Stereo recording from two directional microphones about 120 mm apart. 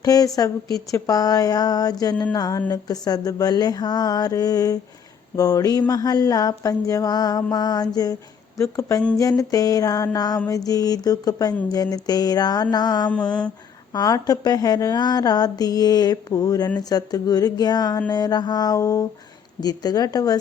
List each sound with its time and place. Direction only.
0.0 s speech: 30° left (ahead or behind)